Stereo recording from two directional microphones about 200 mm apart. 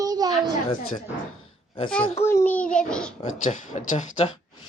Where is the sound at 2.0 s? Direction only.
30° left (ahead or behind).